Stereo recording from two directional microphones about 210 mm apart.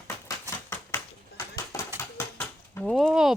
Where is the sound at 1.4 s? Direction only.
15° left (ahead or behind).